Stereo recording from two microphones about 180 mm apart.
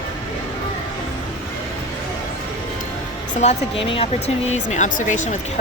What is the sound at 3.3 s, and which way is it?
Speech, 35° left (ahead or behind).